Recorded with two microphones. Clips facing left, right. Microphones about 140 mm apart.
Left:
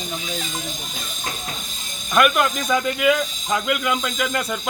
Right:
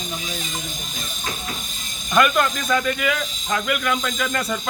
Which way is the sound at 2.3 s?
15° left (ahead or behind).